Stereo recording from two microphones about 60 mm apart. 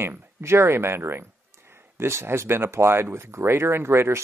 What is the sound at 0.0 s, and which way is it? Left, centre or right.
Speech, right.